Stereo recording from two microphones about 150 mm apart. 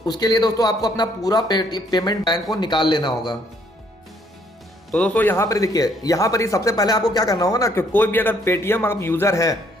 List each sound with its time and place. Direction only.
0.0 s a man's voice: 25° left (ahead or behind)
4.9 s a man's voice: 5° left (ahead or behind)